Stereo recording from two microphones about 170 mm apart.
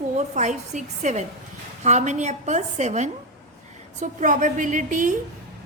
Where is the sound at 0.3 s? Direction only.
45° right (ahead or behind).